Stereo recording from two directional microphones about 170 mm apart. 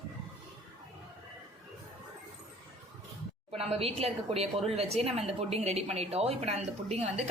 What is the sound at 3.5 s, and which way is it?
A woman's voice, 35° right (ahead or behind).